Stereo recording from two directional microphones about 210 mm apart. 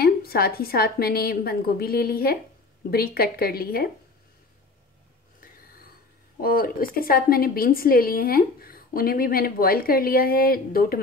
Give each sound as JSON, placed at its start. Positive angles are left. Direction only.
{"t": 0.0, "sound": "a woman's voice", "side_deg": 45}
{"t": 6.4, "sound": "a woman's voice", "side_deg": 45}